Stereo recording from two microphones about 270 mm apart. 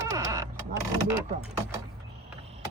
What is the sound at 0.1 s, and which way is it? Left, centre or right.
Vehicle, centre.